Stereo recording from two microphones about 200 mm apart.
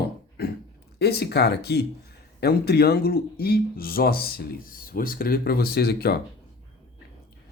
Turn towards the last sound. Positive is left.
turn(degrees=50)  # may be behind; listen again after turning